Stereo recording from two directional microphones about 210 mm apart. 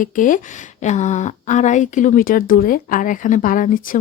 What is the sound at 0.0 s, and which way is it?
Speech, 40° left (ahead or behind).